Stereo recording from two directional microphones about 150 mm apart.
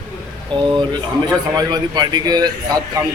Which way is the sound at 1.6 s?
25° right (ahead or behind).